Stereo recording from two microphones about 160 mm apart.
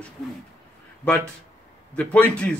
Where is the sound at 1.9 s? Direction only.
10° left (ahead or behind).